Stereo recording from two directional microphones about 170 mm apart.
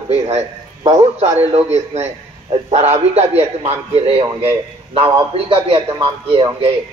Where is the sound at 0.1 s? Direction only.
40° right (ahead or behind).